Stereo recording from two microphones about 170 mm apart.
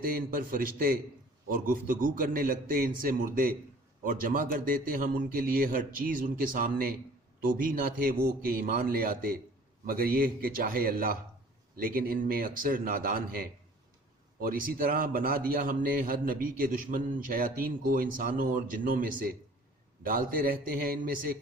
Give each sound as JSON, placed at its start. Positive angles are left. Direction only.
{"t": 0.0, "sound": "a man's voice", "side_deg": -60}